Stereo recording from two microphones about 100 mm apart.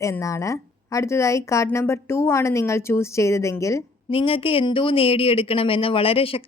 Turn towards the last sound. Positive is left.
turn(degrees=70)  # may be behind; listen again after turning